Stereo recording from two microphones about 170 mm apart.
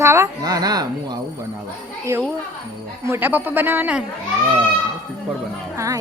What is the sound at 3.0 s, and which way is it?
A child's voice, 10° right (ahead or behind).